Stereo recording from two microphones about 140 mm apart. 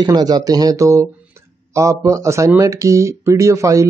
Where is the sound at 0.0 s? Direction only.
30° right (ahead or behind).